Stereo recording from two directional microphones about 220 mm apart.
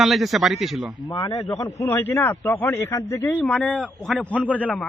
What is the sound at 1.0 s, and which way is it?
A man's voice, 15° left (ahead or behind).